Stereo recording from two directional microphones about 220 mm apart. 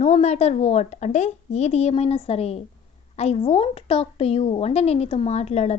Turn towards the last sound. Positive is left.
turn(degrees=30)  # may be behind; listen again after turning